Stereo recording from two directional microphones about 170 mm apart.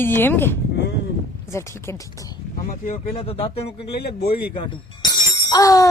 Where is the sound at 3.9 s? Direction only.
70° left (ahead or behind).